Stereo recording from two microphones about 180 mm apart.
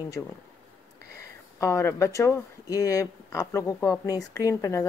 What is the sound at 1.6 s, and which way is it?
Speech, 15° left (ahead or behind).